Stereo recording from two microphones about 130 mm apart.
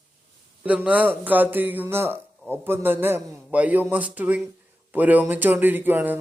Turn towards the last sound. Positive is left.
turn(degrees=-15)  # may be behind; listen again after turning